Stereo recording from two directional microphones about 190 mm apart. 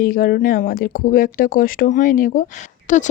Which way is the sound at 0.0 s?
50° left (ahead or behind).